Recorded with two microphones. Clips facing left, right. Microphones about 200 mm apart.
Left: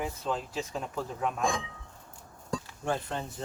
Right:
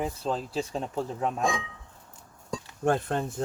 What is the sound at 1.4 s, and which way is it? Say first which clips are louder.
Speech: right 1 dB; centre (ahead or behind).